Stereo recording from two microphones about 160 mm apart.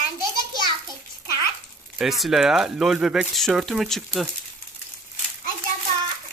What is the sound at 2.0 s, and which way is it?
Speech, centre (ahead or behind).